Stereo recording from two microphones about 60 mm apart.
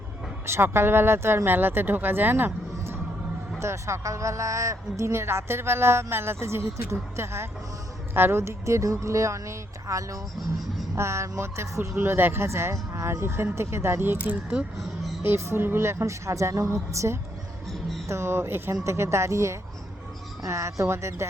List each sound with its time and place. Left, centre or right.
0.4 s a woman's voice: right
3.6 s a woman's voice: right
9.8 s speech: right
10.9 s a woman's voice: right
14.8 s speech: centre
15.2 s a woman's voice: right
18.1 s a woman's voice: right
18.7 s a woman's voice: right